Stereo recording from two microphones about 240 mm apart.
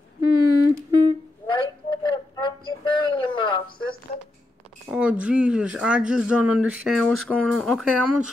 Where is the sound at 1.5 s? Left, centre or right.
Left.